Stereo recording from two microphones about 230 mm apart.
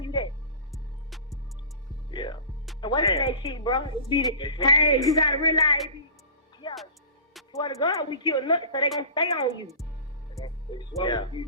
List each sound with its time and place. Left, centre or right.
0.0 s music: centre
0.7 s music: centre
2.0 s a woman's voice: centre
6.6 s music: centre
7.5 s a woman's voice: centre